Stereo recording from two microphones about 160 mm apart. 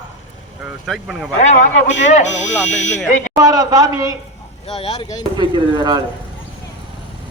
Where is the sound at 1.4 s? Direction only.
45° left (ahead or behind).